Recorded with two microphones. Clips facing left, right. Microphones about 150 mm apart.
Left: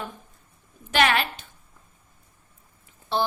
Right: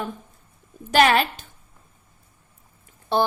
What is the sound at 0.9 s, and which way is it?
Speech, 40° right (ahead or behind).